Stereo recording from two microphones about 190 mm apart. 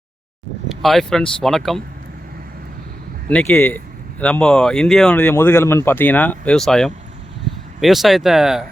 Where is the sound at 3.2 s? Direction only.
10° left (ahead or behind).